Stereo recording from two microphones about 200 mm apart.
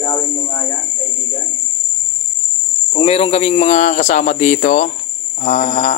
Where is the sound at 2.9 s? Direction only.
30° left (ahead or behind).